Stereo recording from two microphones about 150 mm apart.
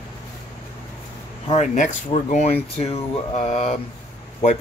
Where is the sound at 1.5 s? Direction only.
50° left (ahead or behind).